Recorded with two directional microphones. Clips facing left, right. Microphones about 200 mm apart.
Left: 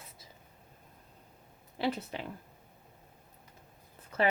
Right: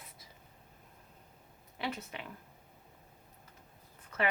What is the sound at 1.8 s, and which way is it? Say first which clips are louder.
Speech: left 6 dB; 35° left (ahead or behind).